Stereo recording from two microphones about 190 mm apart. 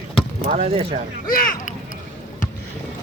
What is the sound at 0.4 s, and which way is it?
Speech, 30° right (ahead or behind).